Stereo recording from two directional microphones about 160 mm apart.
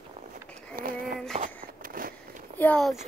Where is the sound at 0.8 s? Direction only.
65° right (ahead or behind).